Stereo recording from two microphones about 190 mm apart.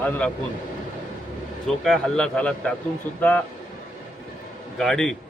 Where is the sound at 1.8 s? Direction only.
Centre (ahead or behind).